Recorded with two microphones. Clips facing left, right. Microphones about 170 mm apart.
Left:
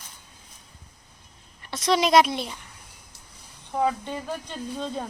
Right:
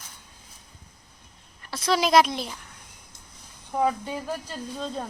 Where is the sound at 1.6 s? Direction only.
Centre (ahead or behind).